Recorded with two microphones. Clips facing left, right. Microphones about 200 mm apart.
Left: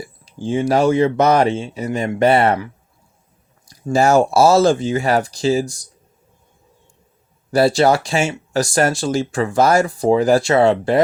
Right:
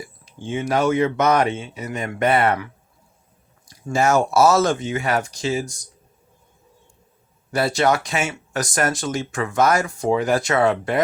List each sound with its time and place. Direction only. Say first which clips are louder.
0.3 s speech: left 5 dB; 35° left (ahead or behind)
3.8 s speech: left 5 dB; 30° left (ahead or behind)
7.5 s speech: left 5 dB; 35° left (ahead or behind)